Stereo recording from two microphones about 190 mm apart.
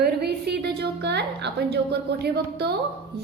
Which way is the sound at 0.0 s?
60° right (ahead or behind).